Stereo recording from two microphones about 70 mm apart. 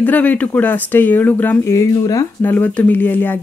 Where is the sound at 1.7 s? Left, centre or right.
Left.